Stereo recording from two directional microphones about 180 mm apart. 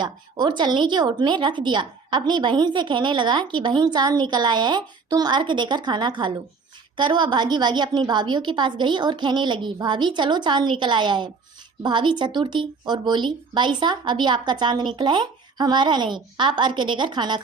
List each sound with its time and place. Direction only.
0.0 s a woman's voice: 25° right (ahead or behind)